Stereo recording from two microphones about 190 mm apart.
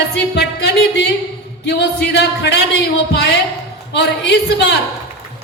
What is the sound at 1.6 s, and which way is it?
Speech, 65° left (ahead or behind).